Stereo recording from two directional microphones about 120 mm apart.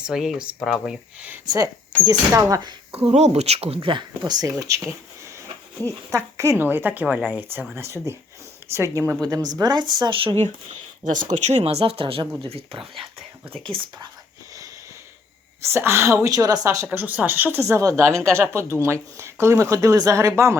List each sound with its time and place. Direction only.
0.0 s speech: 5° right (ahead or behind)
1.5 s a woman's voice: 30° right (ahead or behind)
2.9 s speech: 60° right (ahead or behind); by 4.9 s 25° right (ahead or behind)
6.1 s speech: 25° right (ahead or behind)
7.8 s a woman's voice: 20° right (ahead or behind)
10.0 s speech: 45° right (ahead or behind)
11.0 s speech: 90° right; by 12.8 s 50° right (ahead or behind)
15.6 s a woman's voice: 20° right (ahead or behind)
16.9 s a woman's voice: 15° right (ahead or behind)